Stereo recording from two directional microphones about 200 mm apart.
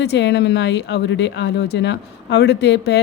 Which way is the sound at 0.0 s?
55° left (ahead or behind).